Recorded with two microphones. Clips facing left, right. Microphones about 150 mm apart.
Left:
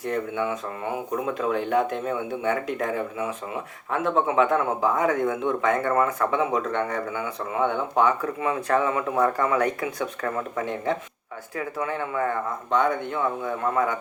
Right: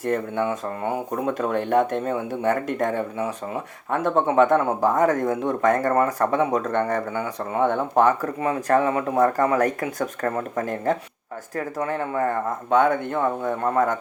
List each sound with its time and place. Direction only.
0.0 s speech: 45° right (ahead or behind)